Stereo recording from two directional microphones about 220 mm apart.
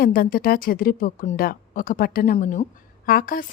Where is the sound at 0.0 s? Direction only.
40° left (ahead or behind).